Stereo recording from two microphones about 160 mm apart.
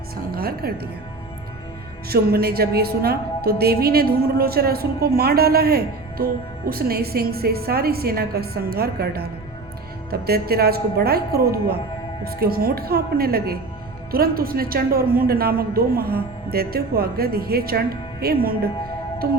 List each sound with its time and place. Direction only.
0.3 s a woman's voice: 70° right (ahead or behind)
2.0 s a man's voice: 75° right (ahead or behind)